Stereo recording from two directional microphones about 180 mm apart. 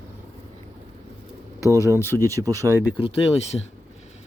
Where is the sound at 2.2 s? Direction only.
20° right (ahead or behind).